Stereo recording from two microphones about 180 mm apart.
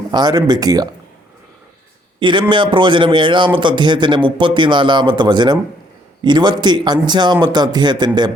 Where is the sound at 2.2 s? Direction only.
25° right (ahead or behind).